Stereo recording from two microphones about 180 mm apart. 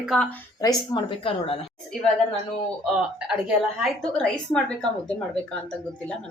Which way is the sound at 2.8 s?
Centre (ahead or behind).